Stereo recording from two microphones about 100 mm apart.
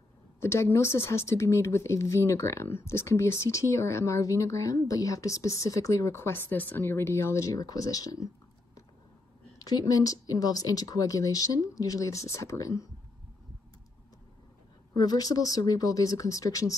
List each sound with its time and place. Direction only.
0.4 s speech: 25° left (ahead or behind)
9.6 s speech: 40° left (ahead or behind)
15.0 s speech: 40° left (ahead or behind)